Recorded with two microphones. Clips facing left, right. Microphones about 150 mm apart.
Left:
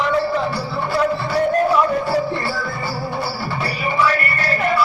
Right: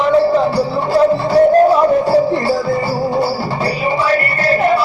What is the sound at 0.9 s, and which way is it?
Music, 35° right (ahead or behind).